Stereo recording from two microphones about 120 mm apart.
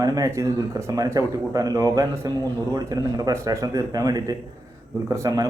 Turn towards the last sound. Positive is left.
turn(degrees=-30)  # may be behind; listen again after turning